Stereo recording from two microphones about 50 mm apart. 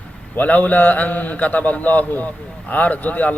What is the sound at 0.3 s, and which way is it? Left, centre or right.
A man's voice, left.